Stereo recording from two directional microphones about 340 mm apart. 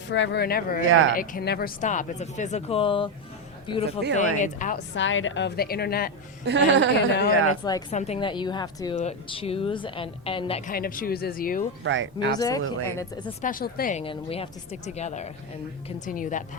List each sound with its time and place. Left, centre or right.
0.1 s speech: left
0.9 s speech: right
1.1 s a woman's voice: left
6.4 s speech: right
7.6 s a woman's voice: centre
11.8 s speech: right
12.4 s a woman's voice: centre